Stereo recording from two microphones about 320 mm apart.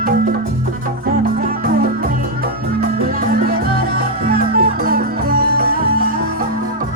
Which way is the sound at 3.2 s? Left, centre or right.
Right.